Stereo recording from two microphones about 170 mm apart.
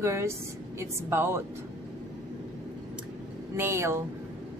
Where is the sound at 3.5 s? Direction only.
15° right (ahead or behind).